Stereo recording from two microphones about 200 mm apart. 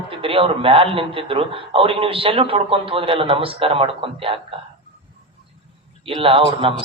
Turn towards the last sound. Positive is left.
turn(degrees=-30)  # may be behind; listen again after turning